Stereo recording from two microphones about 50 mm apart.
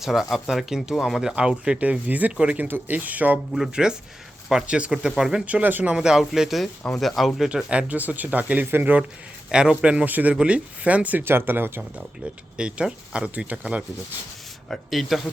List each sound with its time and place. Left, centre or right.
0.0 s speech: centre
1.3 s speech: centre
1.8 s speech: right
3.5 s speech: centre
4.6 s speech: right
5.5 s speech: right
6.0 s speech: centre
7.0 s speech: centre
7.4 s speech: right
9.5 s speech: centre
10.1 s speech: right
11.2 s speech: right
12.5 s speech: centre
14.7 s speech: centre